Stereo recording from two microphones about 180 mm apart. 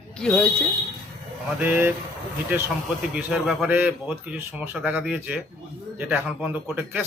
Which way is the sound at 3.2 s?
5° right (ahead or behind).